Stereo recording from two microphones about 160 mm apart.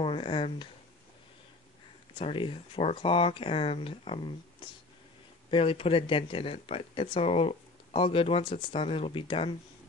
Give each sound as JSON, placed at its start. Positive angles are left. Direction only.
{"t": 0.0, "sound": "speech", "side_deg": 35}
{"t": 2.1, "sound": "speech", "side_deg": 30}